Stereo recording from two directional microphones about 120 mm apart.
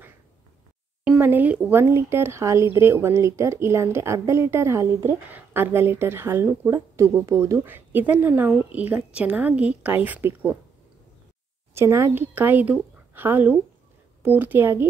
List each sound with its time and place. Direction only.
1.0 s speech: 15° right (ahead or behind)
11.7 s speech: 25° right (ahead or behind)